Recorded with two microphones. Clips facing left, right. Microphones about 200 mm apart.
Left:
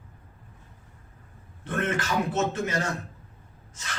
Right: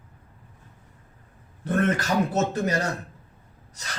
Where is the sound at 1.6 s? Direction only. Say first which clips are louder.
Right 5 dB; 40° right (ahead or behind).